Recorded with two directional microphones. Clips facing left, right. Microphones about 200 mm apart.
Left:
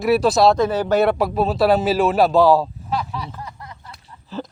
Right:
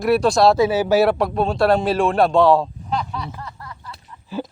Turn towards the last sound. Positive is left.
turn(degrees=30)  # may be behind; listen again after turning